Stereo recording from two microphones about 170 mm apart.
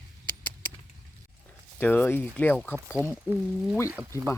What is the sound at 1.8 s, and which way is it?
Speech, 10° left (ahead or behind).